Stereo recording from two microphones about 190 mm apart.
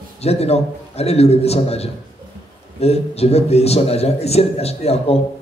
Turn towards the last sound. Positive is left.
turn(degrees=30)  # may be behind; listen again after turning